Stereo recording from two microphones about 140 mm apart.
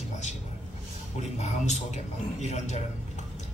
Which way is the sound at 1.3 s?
55° left (ahead or behind).